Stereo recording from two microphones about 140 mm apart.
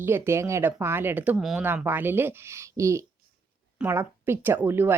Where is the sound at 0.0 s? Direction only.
15° right (ahead or behind).